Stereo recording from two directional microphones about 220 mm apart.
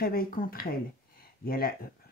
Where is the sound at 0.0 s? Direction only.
40° left (ahead or behind).